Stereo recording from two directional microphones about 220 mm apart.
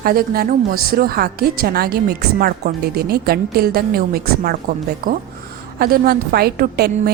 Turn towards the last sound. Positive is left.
turn(degrees=-45)  # may be behind; listen again after turning